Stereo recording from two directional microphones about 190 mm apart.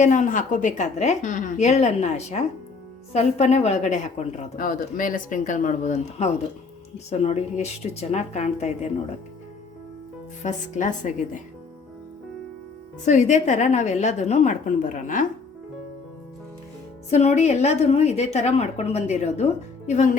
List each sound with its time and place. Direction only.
0.0 s a woman's voice: 40° left (ahead or behind)
10.4 s a woman's voice: 40° left (ahead or behind)
13.1 s a woman's voice: 40° left (ahead or behind)
17.1 s a woman's voice: 35° left (ahead or behind)